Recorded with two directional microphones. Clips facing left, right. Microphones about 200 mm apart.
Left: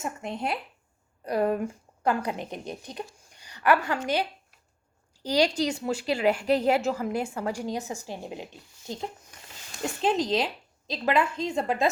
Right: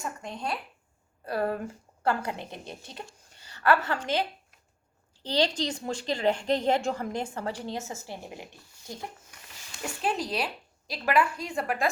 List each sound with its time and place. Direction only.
0.0 s a woman's voice: 20° left (ahead or behind)
10.0 s a woman's voice: 20° left (ahead or behind)